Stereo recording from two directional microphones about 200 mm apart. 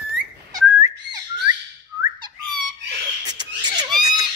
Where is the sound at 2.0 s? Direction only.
20° right (ahead or behind).